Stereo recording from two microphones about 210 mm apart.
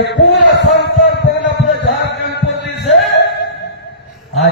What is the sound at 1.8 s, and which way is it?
Music, 60° left (ahead or behind).